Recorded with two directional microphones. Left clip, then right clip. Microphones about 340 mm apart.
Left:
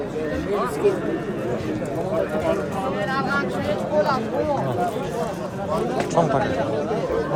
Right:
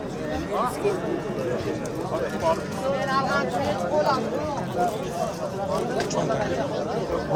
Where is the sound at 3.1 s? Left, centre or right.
Right.